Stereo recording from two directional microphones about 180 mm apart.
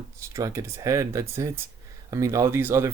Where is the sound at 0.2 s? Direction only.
15° right (ahead or behind).